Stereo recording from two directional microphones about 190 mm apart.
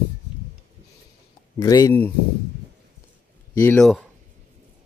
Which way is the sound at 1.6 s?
20° left (ahead or behind).